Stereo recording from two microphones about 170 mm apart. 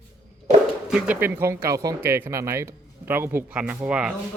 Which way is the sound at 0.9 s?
10° right (ahead or behind).